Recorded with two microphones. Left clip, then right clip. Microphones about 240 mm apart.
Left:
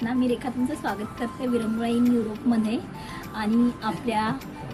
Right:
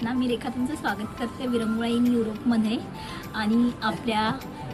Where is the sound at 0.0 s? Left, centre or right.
Centre.